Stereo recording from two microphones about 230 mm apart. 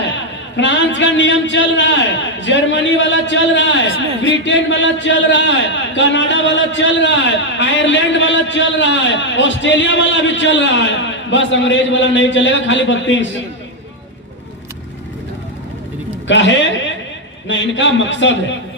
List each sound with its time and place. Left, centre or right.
0.5 s a man's voice: left
16.2 s a man's voice: left